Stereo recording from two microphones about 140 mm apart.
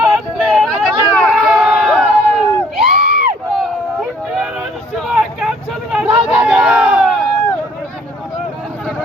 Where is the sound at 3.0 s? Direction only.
90° right.